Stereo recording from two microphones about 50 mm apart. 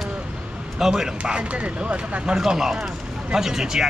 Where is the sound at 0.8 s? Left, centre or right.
Centre.